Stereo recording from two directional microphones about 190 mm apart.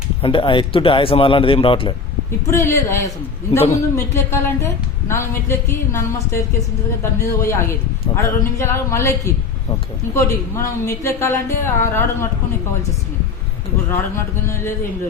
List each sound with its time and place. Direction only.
0.2 s speech: 25° left (ahead or behind)
2.5 s a woman's voice: 15° left (ahead or behind)